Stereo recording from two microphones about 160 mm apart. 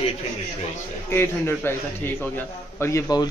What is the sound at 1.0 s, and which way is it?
A man's voice, 15° left (ahead or behind).